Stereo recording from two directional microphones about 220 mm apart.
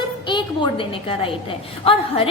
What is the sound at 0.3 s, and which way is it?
A woman's voice, 20° left (ahead or behind).